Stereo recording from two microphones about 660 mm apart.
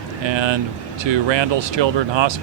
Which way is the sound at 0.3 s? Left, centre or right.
Right.